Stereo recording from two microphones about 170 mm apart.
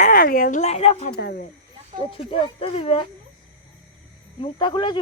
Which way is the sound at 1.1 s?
65° left (ahead or behind).